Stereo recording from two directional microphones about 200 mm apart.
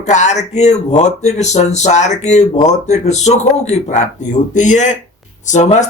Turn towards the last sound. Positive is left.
turn(degrees=35)  # may be behind; listen again after turning